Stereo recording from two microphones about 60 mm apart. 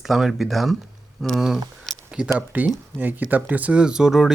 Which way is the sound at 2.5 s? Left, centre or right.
Right.